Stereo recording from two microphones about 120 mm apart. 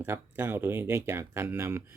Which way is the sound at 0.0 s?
20° right (ahead or behind).